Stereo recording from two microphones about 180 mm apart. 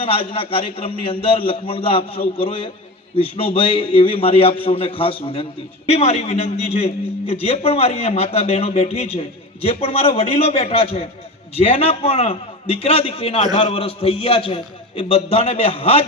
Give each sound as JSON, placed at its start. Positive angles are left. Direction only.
{"t": 0.0, "sound": "a man's voice", "side_deg": 30}